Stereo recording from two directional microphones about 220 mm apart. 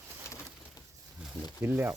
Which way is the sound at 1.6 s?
10° right (ahead or behind).